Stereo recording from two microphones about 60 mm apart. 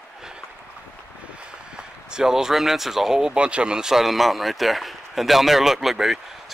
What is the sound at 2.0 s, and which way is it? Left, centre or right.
Speech, centre.